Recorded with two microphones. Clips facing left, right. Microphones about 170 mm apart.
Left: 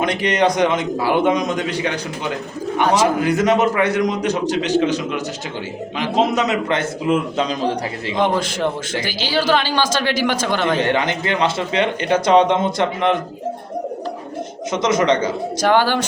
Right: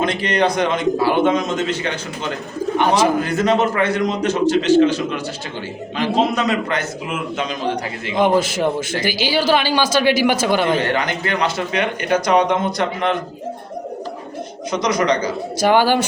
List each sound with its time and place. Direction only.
0.0 s a man's voice: 20° left (ahead or behind)
8.2 s a man's voice: 10° right (ahead or behind)
10.8 s speech: 20° left (ahead or behind)
14.7 s speech: 25° left (ahead or behind)
15.6 s a man's voice: 10° right (ahead or behind)